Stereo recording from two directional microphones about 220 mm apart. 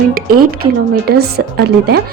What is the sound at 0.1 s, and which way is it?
A woman's voice, 40° right (ahead or behind).